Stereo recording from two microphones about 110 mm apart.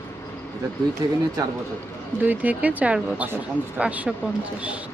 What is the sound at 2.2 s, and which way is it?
Speech, 15° right (ahead or behind).